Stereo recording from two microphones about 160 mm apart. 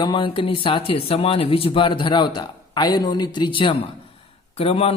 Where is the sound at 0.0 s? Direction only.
30° left (ahead or behind).